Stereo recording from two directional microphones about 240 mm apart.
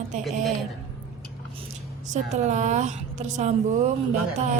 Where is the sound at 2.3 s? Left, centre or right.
Right.